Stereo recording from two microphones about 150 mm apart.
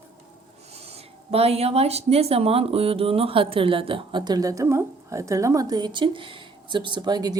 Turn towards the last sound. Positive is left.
turn(degrees=-25)  # may be behind; listen again after turning